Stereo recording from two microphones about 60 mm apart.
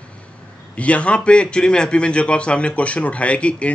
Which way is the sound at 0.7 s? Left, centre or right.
Left.